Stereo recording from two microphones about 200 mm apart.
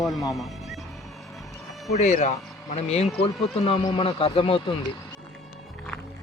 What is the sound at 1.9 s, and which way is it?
Speech, 35° left (ahead or behind).